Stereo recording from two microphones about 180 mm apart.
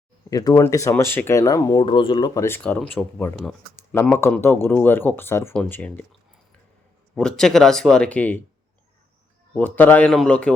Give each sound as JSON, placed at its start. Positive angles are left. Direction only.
{"t": 0.3, "sound": "speech", "side_deg": 20}
{"t": 7.2, "sound": "speech", "side_deg": 5}
{"t": 9.6, "sound": "speech", "side_deg": 10}